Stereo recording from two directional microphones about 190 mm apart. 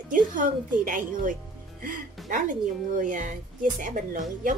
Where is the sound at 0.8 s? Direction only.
45° right (ahead or behind).